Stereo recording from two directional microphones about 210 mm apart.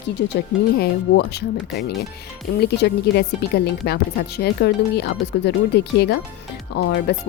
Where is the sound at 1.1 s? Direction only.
50° left (ahead or behind).